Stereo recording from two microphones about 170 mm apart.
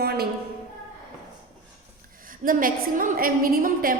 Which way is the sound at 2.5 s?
55° right (ahead or behind).